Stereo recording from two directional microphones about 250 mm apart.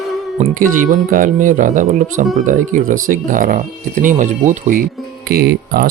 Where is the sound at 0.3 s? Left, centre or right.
Right.